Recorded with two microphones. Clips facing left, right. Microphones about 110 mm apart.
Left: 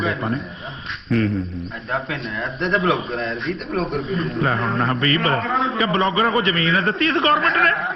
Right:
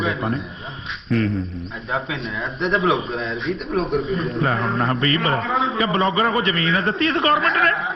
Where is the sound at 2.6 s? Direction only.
Centre (ahead or behind).